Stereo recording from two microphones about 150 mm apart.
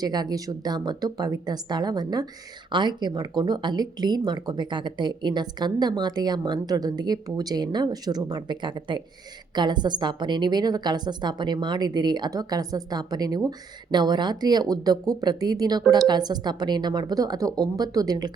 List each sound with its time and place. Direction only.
0.0 s speech: 25° right (ahead or behind)